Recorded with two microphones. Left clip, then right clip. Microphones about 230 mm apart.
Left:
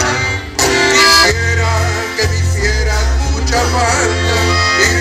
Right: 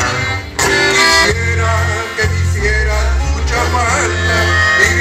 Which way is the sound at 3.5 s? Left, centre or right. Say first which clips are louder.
Left 1 dB; left.